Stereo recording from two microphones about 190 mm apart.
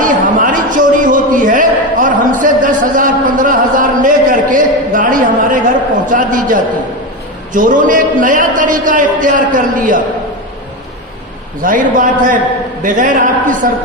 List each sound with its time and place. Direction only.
0.0 s a sound: 45° right (ahead or behind)
6.1 s a man's voice: 45° right (ahead or behind)
11.6 s a man's voice: 45° right (ahead or behind)